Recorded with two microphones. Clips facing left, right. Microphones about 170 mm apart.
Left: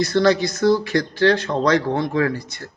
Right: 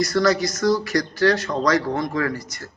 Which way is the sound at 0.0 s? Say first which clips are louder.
Left 2 dB; 25° left (ahead or behind).